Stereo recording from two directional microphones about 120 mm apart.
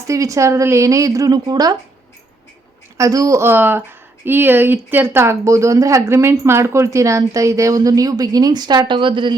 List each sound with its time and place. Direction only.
0.1 s speech: 25° right (ahead or behind)
3.0 s speech: 25° right (ahead or behind); by 9.3 s 45° right (ahead or behind)